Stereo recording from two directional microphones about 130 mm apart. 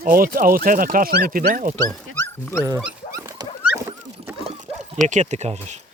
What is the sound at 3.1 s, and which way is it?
Dog, 25° right (ahead or behind).